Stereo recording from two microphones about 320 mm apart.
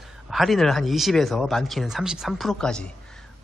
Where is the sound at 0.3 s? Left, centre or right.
Centre.